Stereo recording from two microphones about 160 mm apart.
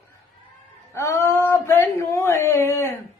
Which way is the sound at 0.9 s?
20° left (ahead or behind).